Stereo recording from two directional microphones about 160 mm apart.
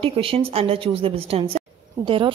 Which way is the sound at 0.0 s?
35° right (ahead or behind).